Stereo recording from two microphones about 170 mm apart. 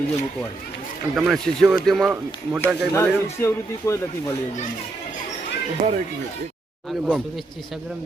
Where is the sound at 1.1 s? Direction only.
Centre (ahead or behind).